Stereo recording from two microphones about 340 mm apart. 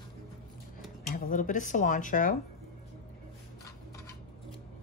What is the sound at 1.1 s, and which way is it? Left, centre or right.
Speech, left.